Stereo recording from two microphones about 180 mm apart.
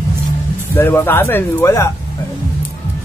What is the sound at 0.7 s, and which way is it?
Speech, 10° left (ahead or behind).